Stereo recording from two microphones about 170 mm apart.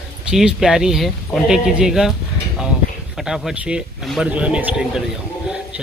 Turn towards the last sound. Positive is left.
turn(degrees=-5)  # may be behind; listen again after turning